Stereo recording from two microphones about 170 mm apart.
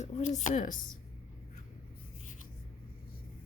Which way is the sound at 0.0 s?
45° left (ahead or behind).